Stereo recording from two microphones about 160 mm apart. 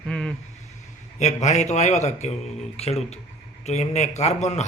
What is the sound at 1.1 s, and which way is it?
A man's voice, 45° left (ahead or behind).